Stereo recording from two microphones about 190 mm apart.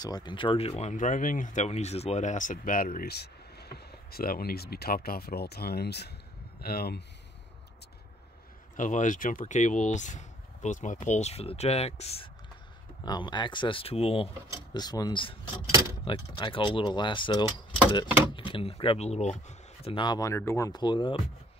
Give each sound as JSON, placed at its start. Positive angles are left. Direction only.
{"t": 0.0, "sound": "speech", "side_deg": 20}
{"t": 8.7, "sound": "speech", "side_deg": 40}
{"t": 13.0, "sound": "speech", "side_deg": 20}